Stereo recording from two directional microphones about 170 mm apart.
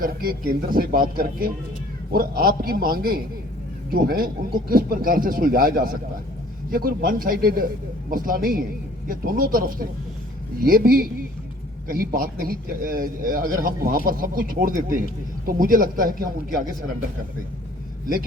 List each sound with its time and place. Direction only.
0.0 s a man's voice: 60° right (ahead or behind)